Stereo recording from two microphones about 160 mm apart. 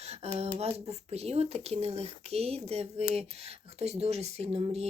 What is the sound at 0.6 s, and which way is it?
Speech, 40° right (ahead or behind).